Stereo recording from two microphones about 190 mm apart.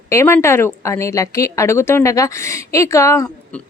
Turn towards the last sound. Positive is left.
turn(degrees=15)  # may be behind; listen again after turning